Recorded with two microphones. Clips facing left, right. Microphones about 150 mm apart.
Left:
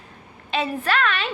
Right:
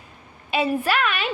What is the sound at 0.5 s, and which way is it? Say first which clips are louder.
Speech: right 2 dB; 10° right (ahead or behind).